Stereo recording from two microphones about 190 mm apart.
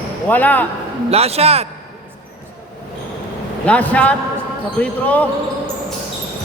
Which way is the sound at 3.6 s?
5° left (ahead or behind).